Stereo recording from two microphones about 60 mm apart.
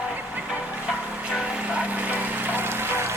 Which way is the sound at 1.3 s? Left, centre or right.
Centre.